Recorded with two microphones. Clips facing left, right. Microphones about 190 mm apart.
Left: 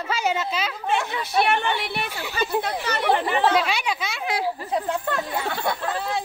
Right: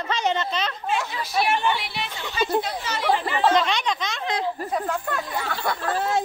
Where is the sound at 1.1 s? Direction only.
60° left (ahead or behind).